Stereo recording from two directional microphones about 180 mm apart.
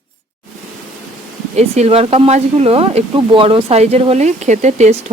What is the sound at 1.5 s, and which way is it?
Speech, 40° right (ahead or behind).